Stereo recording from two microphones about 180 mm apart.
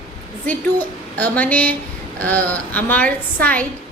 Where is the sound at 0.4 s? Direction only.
10° left (ahead or behind).